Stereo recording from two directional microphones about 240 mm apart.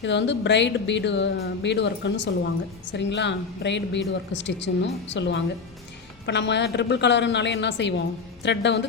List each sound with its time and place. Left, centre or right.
0.0 s speech: left